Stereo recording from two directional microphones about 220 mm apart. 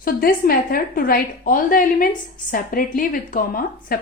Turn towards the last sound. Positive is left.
turn(degrees=40)  # may be behind; listen again after turning